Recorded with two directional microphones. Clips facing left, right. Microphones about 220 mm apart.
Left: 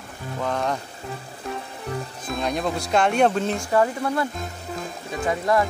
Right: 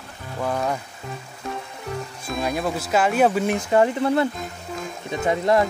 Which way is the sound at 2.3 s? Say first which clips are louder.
Right 1 dB; 5° right (ahead or behind).